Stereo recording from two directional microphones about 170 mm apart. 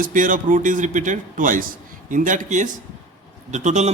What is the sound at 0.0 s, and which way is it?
A man's voice, 50° right (ahead or behind).